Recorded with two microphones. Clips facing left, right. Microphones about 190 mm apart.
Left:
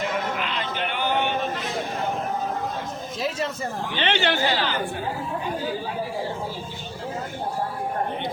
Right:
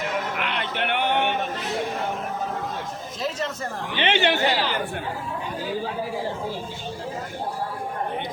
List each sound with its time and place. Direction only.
0.3 s a sound: 65° right (ahead or behind)
3.9 s speech: 20° right (ahead or behind)
4.4 s speech: centre (ahead or behind)